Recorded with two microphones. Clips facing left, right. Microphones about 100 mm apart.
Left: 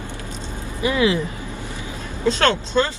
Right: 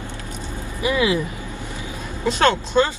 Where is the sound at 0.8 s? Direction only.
15° right (ahead or behind).